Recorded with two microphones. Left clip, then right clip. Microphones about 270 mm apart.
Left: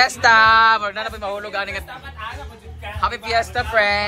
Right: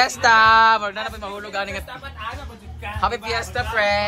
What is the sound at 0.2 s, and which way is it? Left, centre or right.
Speech, centre.